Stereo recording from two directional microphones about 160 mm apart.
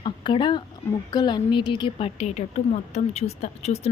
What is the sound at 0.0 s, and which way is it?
A woman's voice, 30° left (ahead or behind).